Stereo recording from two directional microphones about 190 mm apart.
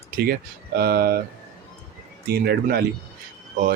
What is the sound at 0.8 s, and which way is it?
Speech, 55° right (ahead or behind).